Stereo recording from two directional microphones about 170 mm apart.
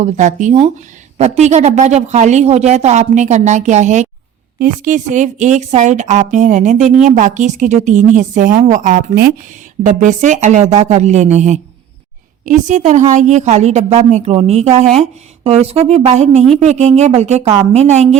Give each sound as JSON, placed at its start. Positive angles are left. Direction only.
{"t": 0.0, "sound": "a woman's voice", "side_deg": -45}